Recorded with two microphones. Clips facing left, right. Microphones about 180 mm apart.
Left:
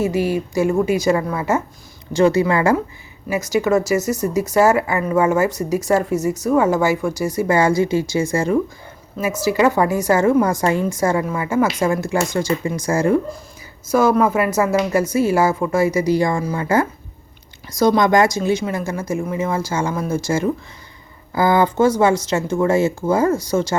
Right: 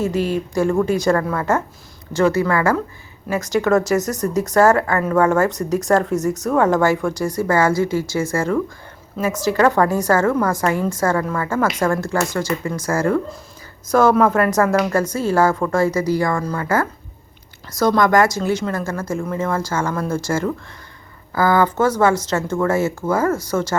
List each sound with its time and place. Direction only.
0.0 s speech: 10° left (ahead or behind)
2.1 s speech: 15° left (ahead or behind)
3.2 s speech: 10° left (ahead or behind)
9.1 s a woman's voice: 5° left (ahead or behind); by 10.8 s 20° left (ahead or behind)
10.8 s speech: 10° left (ahead or behind)
13.9 s speech: 5° left (ahead or behind)